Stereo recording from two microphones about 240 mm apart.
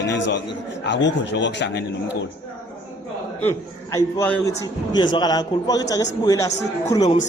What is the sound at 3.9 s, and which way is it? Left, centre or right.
A man's voice, centre.